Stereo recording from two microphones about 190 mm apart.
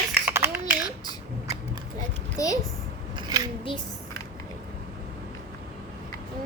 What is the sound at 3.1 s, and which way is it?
Scissors, 20° right (ahead or behind).